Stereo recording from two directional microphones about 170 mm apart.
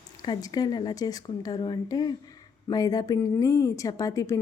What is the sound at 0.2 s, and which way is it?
Speech, 20° left (ahead or behind).